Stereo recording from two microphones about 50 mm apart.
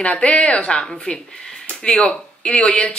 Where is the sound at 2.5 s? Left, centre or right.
Centre.